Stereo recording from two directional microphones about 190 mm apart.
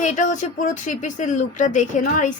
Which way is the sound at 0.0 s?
40° left (ahead or behind).